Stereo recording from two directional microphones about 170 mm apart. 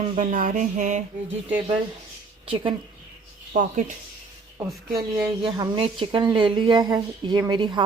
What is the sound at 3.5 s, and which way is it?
Speech, 50° right (ahead or behind).